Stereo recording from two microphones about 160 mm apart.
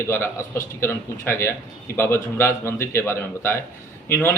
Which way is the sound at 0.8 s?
15° left (ahead or behind).